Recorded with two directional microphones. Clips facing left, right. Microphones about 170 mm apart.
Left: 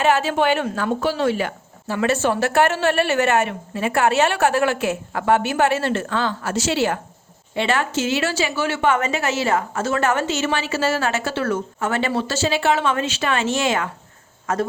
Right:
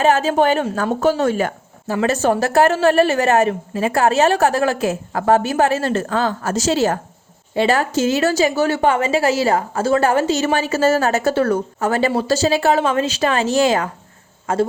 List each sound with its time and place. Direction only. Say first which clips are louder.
0.0 s a woman's voice: right 3 dB; 40° right (ahead or behind)